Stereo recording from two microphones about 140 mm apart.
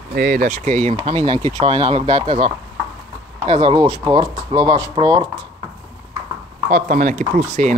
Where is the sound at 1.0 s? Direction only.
40° right (ahead or behind).